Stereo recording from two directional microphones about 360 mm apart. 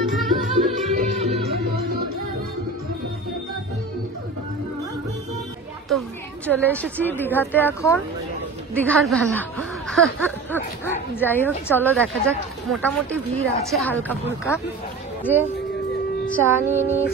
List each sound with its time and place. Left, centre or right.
0.0 s music: centre
0.6 s music: centre
5.9 s a woman's voice: centre
16.3 s music: centre
16.6 s a sound: centre